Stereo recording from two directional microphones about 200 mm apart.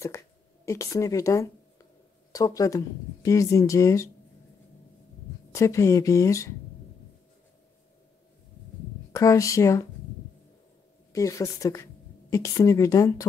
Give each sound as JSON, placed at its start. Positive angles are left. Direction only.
{"t": 0.7, "sound": "speech", "side_deg": 15}
{"t": 5.5, "sound": "speech", "side_deg": 15}
{"t": 9.1, "sound": "speech", "side_deg": 15}
{"t": 11.1, "sound": "a woman's voice", "side_deg": 15}